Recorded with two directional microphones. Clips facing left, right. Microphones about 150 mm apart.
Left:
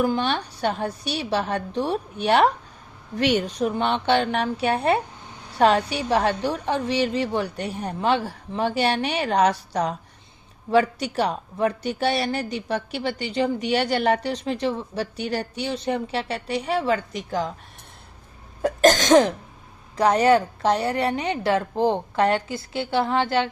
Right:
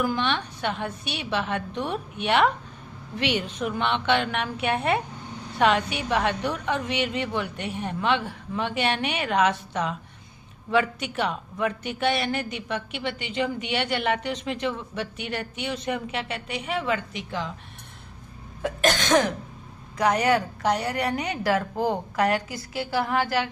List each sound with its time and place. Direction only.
0.0 s speech: 35° left (ahead or behind)
18.6 s speech: 40° left (ahead or behind)
20.0 s a woman's voice: 30° left (ahead or behind)